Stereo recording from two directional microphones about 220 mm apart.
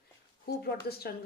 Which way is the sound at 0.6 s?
45° left (ahead or behind).